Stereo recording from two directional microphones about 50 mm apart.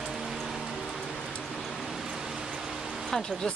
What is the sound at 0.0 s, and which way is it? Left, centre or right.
Raindrop, centre.